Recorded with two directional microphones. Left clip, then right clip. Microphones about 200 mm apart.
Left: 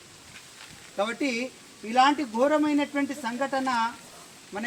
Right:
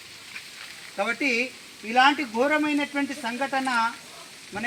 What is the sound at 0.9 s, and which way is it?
Speech, 20° right (ahead or behind).